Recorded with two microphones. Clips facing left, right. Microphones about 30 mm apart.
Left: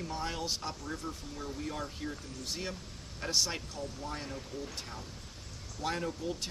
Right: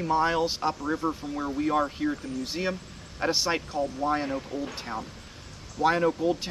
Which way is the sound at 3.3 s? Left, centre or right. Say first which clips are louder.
Right 6 dB; right.